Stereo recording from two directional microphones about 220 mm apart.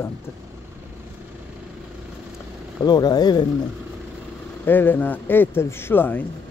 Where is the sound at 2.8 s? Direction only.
20° left (ahead or behind).